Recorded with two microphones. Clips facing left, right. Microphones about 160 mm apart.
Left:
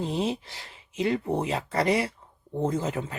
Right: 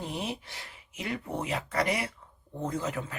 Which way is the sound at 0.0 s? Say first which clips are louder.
Left 7 dB; 30° left (ahead or behind).